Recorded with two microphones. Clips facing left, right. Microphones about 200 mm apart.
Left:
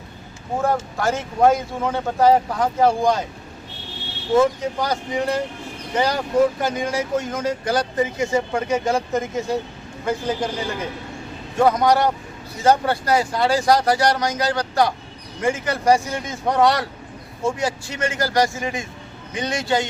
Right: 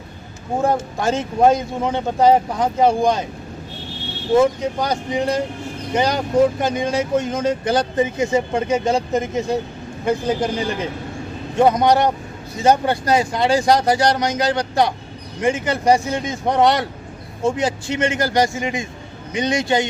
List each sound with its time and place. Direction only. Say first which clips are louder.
0.6 s speech: right 2 dB; 20° right (ahead or behind)
4.4 s speech: right 2 dB; 20° right (ahead or behind)